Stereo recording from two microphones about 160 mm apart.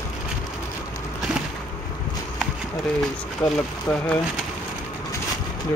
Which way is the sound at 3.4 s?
10° left (ahead or behind).